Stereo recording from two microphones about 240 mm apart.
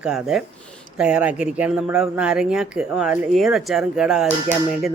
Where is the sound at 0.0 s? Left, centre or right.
Centre.